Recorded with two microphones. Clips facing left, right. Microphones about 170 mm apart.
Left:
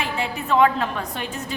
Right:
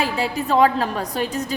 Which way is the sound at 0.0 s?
35° right (ahead or behind).